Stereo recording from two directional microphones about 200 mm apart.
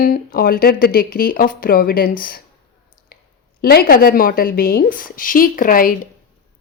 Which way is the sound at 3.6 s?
50° left (ahead or behind).